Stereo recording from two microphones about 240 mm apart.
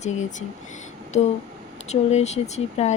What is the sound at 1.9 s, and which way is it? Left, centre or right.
Speech, left.